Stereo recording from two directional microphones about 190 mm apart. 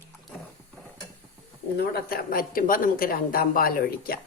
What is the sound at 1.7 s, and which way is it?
A woman's voice, 55° left (ahead or behind).